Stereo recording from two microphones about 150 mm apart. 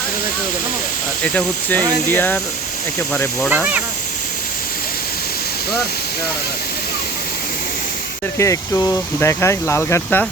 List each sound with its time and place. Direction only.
1.2 s speech: 10° left (ahead or behind)
3.5 s speech: 10° right (ahead or behind)
8.4 s speech: 20° left (ahead or behind)